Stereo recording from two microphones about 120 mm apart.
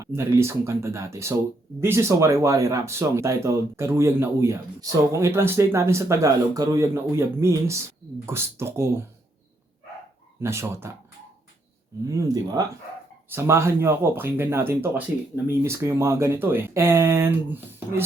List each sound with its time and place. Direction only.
0.0 s speech: 20° right (ahead or behind)
10.4 s speech: 20° right (ahead or behind)
12.0 s speech: 30° right (ahead or behind)